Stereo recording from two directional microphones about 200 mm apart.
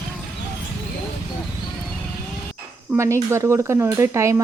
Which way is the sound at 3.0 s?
15° right (ahead or behind).